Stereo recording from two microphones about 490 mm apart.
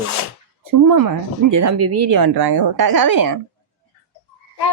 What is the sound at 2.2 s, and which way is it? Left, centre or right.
Speech, right.